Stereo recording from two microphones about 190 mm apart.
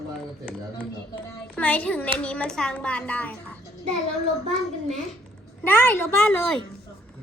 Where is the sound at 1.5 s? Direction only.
5° left (ahead or behind).